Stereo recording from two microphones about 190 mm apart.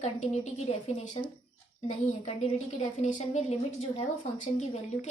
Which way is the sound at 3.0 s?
40° left (ahead or behind).